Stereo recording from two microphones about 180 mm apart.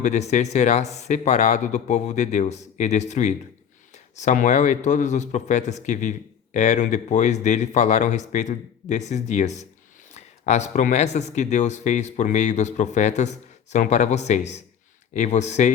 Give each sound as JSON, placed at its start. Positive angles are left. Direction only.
{"t": 0.0, "sound": "speech", "side_deg": 40}